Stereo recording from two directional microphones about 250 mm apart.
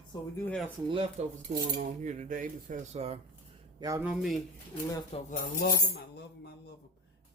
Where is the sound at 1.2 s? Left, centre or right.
Right.